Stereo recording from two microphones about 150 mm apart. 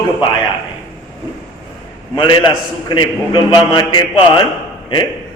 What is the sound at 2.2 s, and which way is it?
A man's voice, 30° left (ahead or behind).